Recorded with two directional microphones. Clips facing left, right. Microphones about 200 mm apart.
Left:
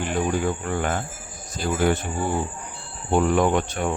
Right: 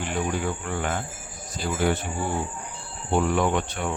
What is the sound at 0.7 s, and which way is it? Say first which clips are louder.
Cricket: left 3 dB; 45° left (ahead or behind).